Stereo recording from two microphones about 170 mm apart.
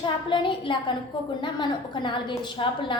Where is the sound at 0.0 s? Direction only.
30° left (ahead or behind).